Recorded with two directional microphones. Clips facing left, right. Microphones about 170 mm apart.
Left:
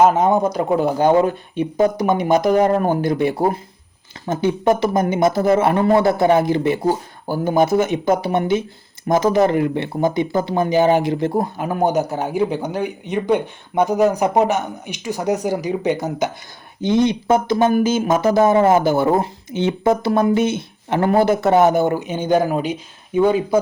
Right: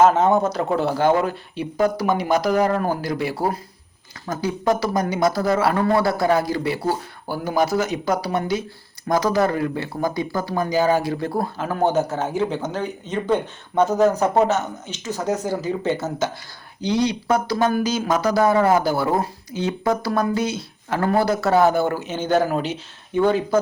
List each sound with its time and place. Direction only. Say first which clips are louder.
0.0 s speech: left 1 dB; 10° left (ahead or behind)